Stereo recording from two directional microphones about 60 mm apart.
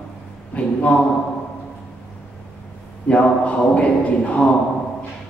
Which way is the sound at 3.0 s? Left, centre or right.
Left.